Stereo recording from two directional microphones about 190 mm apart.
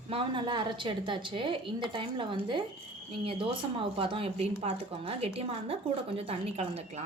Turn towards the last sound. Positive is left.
turn(degrees=-35)  # may be behind; listen again after turning